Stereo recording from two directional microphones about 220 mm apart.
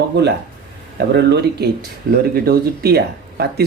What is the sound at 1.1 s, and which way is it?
Speech, 50° right (ahead or behind).